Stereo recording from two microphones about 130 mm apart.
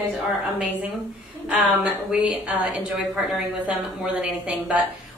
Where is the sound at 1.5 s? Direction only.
5° right (ahead or behind).